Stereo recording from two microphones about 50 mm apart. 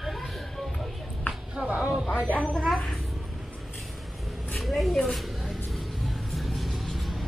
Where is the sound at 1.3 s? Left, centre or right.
Centre.